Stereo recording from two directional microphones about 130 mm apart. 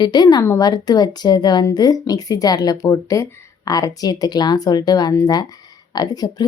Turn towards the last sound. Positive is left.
turn(degrees=30)  # may be behind; listen again after turning